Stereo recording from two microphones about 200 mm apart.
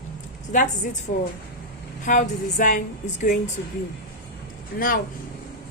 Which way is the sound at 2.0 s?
40° left (ahead or behind).